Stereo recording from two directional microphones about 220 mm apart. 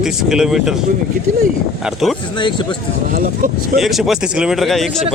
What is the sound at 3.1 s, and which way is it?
Speech, 40° right (ahead or behind).